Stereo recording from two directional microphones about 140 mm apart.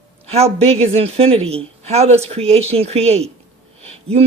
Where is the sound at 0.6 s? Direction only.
45° right (ahead or behind).